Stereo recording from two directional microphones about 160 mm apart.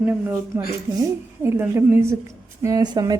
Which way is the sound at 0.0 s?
10° right (ahead or behind).